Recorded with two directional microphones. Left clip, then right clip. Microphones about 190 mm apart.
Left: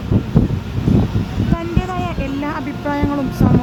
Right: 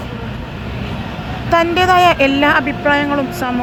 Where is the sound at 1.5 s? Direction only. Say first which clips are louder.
Right 15 dB; 5° right (ahead or behind).